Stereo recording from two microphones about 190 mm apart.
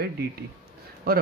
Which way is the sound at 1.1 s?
55° right (ahead or behind).